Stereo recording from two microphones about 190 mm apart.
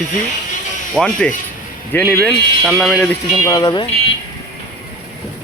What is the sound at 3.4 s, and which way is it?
Speech, 20° left (ahead or behind).